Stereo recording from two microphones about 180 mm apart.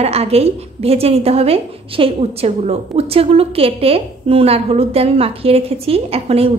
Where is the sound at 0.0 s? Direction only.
35° right (ahead or behind).